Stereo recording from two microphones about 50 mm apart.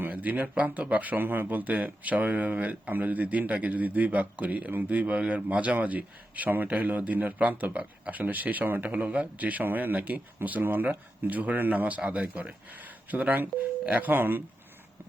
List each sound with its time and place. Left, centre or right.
0.0 s a sound: right
0.4 s speech: right
8.8 s a man's voice: right